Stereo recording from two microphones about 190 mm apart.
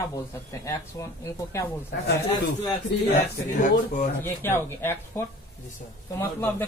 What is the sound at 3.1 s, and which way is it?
Speech, 40° left (ahead or behind).